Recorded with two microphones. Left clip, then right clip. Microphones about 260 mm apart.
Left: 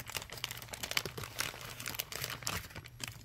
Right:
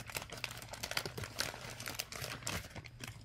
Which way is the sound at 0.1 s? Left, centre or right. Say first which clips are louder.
Left 2 dB; centre.